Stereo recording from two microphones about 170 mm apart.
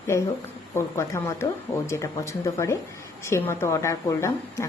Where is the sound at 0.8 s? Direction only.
15° left (ahead or behind).